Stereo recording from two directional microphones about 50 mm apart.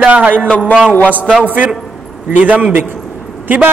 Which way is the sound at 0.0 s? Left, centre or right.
Right.